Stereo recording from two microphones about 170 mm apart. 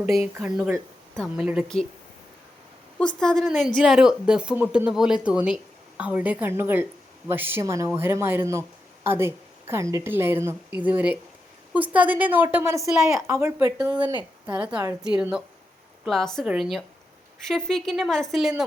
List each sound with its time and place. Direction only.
0.4 s speech: 5° right (ahead or behind)
3.2 s a woman's voice: 5° left (ahead or behind)